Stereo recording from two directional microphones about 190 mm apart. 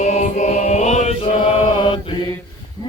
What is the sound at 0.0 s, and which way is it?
Chant, 35° left (ahead or behind).